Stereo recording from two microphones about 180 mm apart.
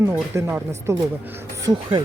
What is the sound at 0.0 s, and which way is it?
Speech, 15° right (ahead or behind).